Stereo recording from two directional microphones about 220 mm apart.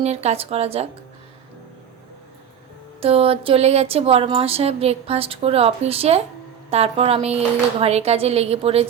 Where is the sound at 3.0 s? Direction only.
25° right (ahead or behind).